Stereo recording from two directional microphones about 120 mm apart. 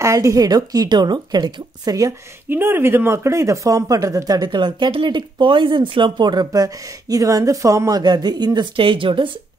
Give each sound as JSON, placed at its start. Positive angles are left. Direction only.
{"t": 0.0, "sound": "speech", "side_deg": -25}
{"t": 2.5, "sound": "speech", "side_deg": -20}